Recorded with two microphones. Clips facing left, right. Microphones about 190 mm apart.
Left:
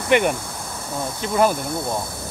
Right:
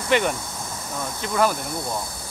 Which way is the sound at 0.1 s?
15° left (ahead or behind).